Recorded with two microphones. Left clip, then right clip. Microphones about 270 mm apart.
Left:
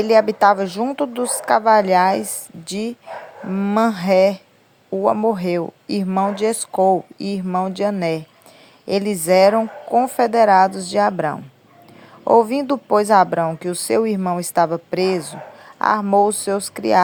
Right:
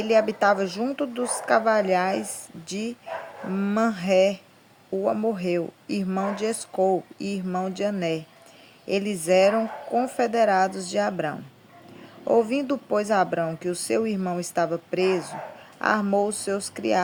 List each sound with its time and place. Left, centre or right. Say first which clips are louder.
0.0 s speech: left 7 dB; centre